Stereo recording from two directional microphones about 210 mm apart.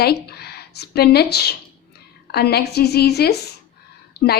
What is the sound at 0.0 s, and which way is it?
A woman's voice, 50° left (ahead or behind).